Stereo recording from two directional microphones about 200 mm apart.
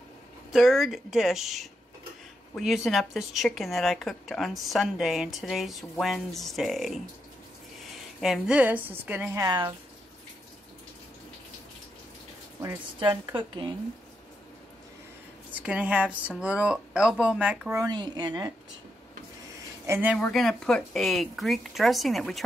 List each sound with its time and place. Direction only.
0.5 s speech: centre (ahead or behind)
8.2 s speech: 5° right (ahead or behind); by 9.8 s 20° right (ahead or behind)
12.6 s speech: 15° right (ahead or behind)
15.5 s speech: 5° right (ahead or behind)
17.8 s speech: 20° right (ahead or behind)
19.9 s speech: 10° right (ahead or behind)
20.2 s speech: 5° left (ahead or behind)